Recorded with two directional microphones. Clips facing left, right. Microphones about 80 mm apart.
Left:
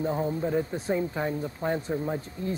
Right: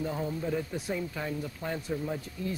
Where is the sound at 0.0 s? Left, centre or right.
Left.